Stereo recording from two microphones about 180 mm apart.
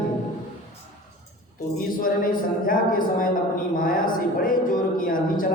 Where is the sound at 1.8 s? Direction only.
50° left (ahead or behind).